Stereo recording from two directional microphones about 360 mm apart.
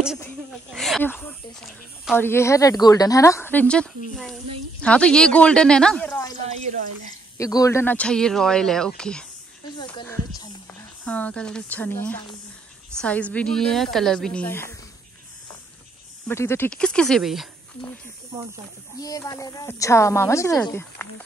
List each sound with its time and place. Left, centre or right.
0.7 s speech: centre
6.4 s speech: centre
7.3 s speech: centre
9.8 s a sound: centre
11.1 s speech: centre
16.3 s speech: centre
18.9 s a woman's voice: centre